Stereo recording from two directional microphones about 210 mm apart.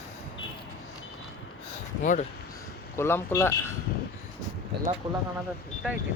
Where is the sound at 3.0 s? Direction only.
10° left (ahead or behind).